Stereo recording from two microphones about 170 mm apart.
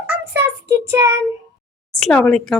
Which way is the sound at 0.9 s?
15° right (ahead or behind).